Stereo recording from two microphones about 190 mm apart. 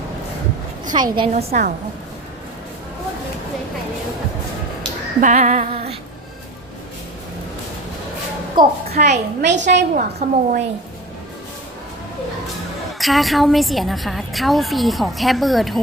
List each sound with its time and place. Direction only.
0.9 s a woman's voice: 25° right (ahead or behind)
1.3 s a woman's voice: 35° right (ahead or behind)
5.2 s female singing: 40° right (ahead or behind)
8.5 s a woman's voice: 35° right (ahead or behind)
9.4 s a woman's voice: 70° right (ahead or behind)
9.9 s a woman's voice: 45° right (ahead or behind)
13.0 s a woman's voice: centre (ahead or behind)